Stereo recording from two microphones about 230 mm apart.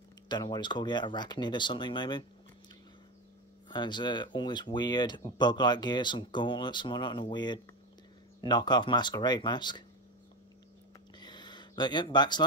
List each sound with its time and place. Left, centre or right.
0.3 s speech: centre
3.6 s speech: centre
11.1 s a sound: centre